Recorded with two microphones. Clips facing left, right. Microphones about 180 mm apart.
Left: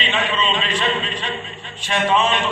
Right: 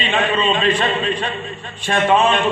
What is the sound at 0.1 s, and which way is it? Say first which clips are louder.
Speech: right 5 dB; 50° right (ahead or behind).